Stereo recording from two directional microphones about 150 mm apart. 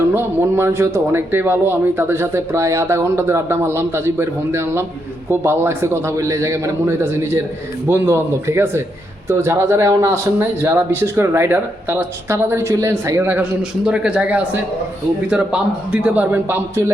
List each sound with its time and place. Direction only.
0.1 s speech: 15° right (ahead or behind)